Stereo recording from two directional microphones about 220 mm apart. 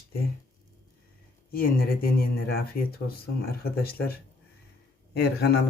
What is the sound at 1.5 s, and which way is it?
Speech, 40° left (ahead or behind).